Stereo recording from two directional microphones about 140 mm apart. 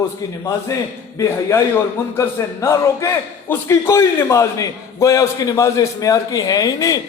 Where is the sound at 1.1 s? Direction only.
20° left (ahead or behind).